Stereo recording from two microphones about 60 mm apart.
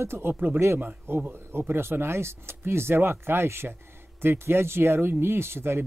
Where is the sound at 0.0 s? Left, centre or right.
Right.